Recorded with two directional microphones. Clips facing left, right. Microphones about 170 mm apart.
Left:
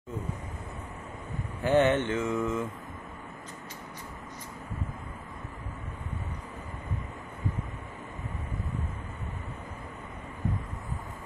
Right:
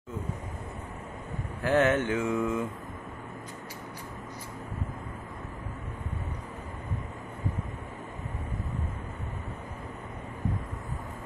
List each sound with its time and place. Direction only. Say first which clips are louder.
1.6 s mantra: left 1 dB; centre (ahead or behind)